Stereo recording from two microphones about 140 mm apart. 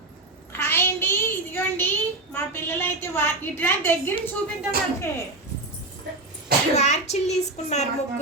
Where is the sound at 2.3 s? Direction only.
15° left (ahead or behind).